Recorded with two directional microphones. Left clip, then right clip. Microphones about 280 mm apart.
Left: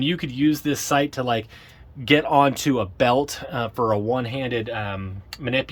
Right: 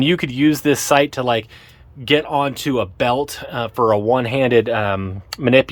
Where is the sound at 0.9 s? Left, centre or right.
Centre.